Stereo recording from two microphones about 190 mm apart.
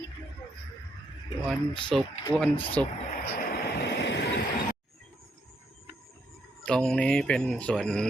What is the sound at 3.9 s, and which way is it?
Vehicle, 65° left (ahead or behind).